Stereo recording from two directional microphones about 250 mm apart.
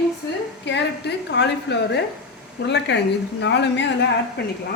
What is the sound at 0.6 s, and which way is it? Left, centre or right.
A woman's voice, left.